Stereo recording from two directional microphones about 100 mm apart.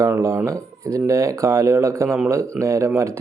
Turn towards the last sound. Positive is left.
turn(degrees=-30)  # may be behind; listen again after turning